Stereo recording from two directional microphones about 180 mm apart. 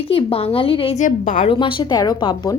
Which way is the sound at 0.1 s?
30° left (ahead or behind).